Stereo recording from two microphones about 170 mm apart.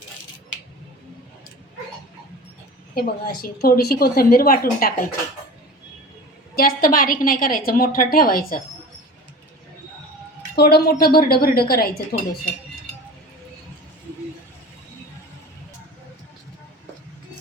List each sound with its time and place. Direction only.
2.9 s a woman's voice: 65° left (ahead or behind)
6.6 s a woman's voice: 60° left (ahead or behind)
10.5 s a woman's voice: 70° left (ahead or behind)